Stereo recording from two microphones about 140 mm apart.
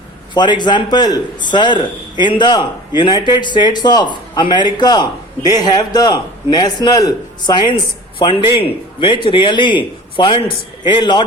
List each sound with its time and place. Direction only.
0.3 s a man's voice: 30° left (ahead or behind)